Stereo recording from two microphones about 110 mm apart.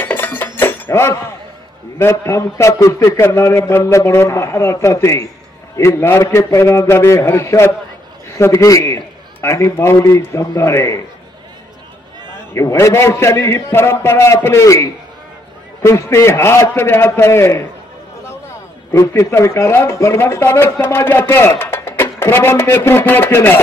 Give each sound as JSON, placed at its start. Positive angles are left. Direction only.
{"t": 0.0, "sound": "a sound", "side_deg": 15}
{"t": 0.6, "sound": "chink", "side_deg": 15}
{"t": 2.0, "sound": "speech", "side_deg": 25}
{"t": 12.5, "sound": "speech", "side_deg": 25}
{"t": 18.9, "sound": "speech", "side_deg": 25}